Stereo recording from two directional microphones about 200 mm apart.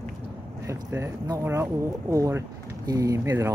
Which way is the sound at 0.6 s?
15° right (ahead or behind).